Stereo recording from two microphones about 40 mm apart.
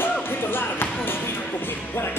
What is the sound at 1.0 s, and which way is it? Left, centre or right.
Basketball bounce, left.